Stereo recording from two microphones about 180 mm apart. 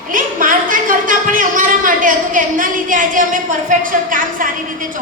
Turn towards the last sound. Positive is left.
turn(degrees=-50)  # may be behind; listen again after turning